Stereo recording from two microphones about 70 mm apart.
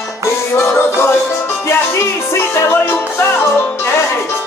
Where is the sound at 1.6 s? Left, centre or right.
Left.